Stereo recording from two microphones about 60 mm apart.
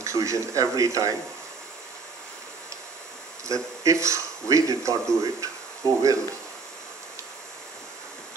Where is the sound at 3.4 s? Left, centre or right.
Right.